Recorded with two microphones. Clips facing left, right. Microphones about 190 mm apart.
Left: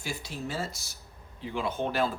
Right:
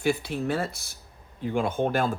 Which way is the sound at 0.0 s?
60° right (ahead or behind).